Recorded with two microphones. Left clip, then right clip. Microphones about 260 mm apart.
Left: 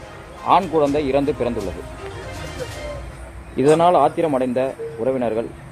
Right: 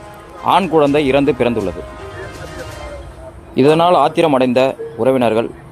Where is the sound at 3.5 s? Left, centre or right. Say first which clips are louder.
Right 3 dB; right.